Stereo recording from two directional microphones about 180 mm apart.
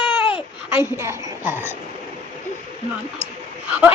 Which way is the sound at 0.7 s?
15° right (ahead or behind).